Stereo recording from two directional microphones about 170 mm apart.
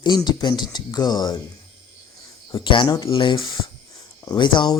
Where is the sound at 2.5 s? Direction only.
25° left (ahead or behind).